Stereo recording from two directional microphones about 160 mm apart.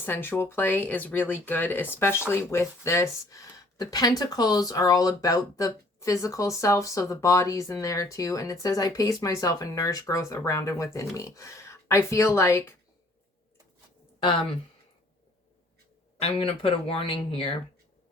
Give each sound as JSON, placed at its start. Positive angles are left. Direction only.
{"t": 0.0, "sound": "speech", "side_deg": 15}
{"t": 16.1, "sound": "speech", "side_deg": 35}